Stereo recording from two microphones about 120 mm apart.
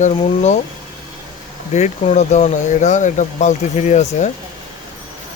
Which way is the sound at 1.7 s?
70° left (ahead or behind).